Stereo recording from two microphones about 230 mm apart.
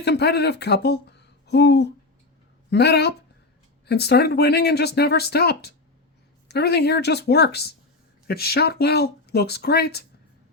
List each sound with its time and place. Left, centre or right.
0.0 s speech: left